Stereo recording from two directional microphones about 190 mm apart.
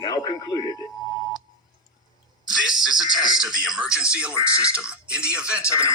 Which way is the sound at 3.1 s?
20° left (ahead or behind).